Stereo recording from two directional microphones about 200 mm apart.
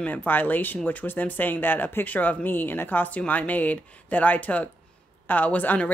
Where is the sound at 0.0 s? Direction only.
10° left (ahead or behind).